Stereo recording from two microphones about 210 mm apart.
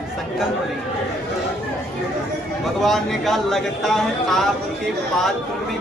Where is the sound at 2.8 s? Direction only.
Centre (ahead or behind).